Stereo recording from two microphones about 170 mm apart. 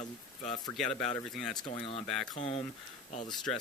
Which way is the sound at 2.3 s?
40° left (ahead or behind).